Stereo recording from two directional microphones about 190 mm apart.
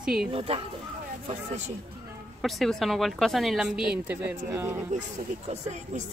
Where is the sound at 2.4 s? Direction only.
Centre (ahead or behind); by 4.8 s 15° right (ahead or behind).